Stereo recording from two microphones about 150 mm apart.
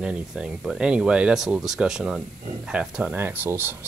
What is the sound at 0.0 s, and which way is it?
Speech, 5° right (ahead or behind).